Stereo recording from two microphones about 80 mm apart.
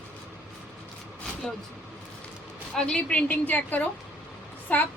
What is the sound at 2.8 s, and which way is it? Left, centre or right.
A woman's voice, centre.